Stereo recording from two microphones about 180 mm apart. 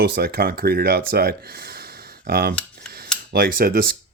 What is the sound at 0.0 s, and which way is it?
Speech, 60° right (ahead or behind).